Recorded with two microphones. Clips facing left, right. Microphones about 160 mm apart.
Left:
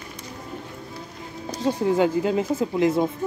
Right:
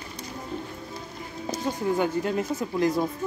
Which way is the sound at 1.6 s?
20° left (ahead or behind).